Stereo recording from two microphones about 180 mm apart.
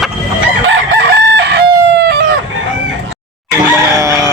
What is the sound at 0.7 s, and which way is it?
Chicken, 90° right.